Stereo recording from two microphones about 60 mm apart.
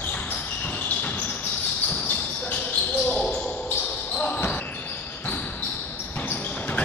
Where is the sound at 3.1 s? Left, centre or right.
Left.